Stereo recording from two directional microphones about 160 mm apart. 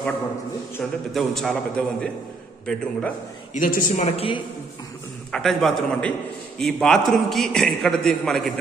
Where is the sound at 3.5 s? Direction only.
55° left (ahead or behind).